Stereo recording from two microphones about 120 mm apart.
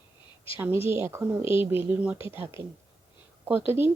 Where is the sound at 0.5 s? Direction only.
20° right (ahead or behind).